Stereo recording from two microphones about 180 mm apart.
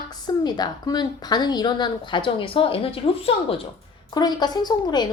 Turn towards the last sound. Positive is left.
turn(degrees=25)  # may be behind; listen again after turning